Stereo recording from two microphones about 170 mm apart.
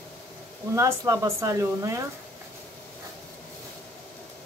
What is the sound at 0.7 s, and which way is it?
Speech, 15° right (ahead or behind).